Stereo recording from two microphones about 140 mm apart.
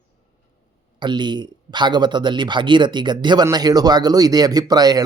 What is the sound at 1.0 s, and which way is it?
Speech, 35° right (ahead or behind).